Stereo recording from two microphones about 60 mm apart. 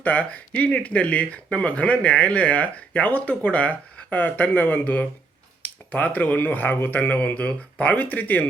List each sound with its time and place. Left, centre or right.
0.0 s speech: left